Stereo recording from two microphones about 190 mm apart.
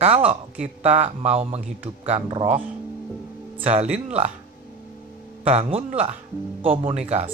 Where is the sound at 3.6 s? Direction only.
35° right (ahead or behind).